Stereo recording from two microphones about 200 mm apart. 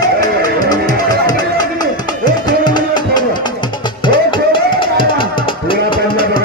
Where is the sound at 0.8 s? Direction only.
40° left (ahead or behind).